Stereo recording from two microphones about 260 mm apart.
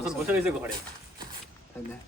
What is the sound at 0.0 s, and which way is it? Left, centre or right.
Speech, centre.